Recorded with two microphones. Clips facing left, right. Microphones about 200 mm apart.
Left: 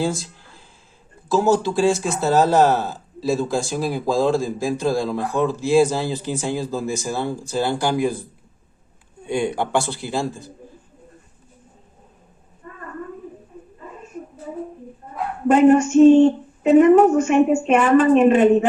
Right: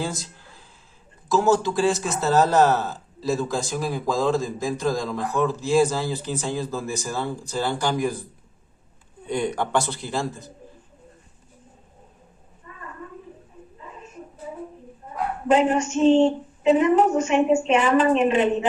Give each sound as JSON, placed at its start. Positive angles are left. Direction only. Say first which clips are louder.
{"t": 1.4, "sound": "speech", "louder": "left 2 dB", "side_deg": 15}
{"t": 9.2, "sound": "speech", "louder": "left 3 dB", "side_deg": 10}
{"t": 12.6, "sound": "a sound", "louder": "left 6 dB", "side_deg": 55}
{"t": 15.4, "sound": "a woman's voice", "louder": "left 7 dB", "side_deg": 55}